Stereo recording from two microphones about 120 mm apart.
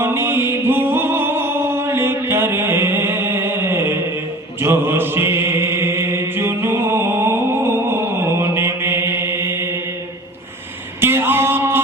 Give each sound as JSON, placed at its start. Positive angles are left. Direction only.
{"t": 0.0, "sound": "music", "side_deg": -20}
{"t": 4.6, "sound": "chant", "side_deg": -20}
{"t": 11.0, "sound": "male singing", "side_deg": -20}